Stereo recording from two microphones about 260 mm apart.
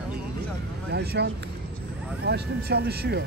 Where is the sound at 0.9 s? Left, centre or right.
Right.